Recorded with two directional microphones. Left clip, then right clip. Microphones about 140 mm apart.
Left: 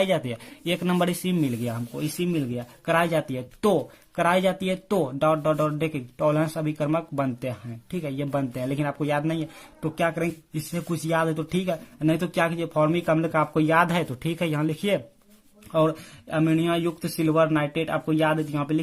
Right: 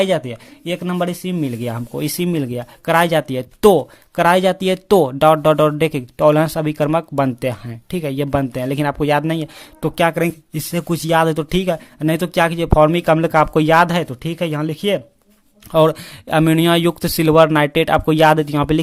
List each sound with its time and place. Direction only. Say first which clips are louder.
0.0 s speech: right 6 dB; 30° right (ahead or behind)
1.6 s speech: right 7 dB; 50° right (ahead or behind)
13.9 s speech: right 6 dB; 30° right (ahead or behind)
15.7 s speech: right 9 dB; 55° right (ahead or behind)